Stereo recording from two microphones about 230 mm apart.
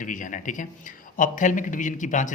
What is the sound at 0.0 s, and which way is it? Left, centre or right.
Speech, left.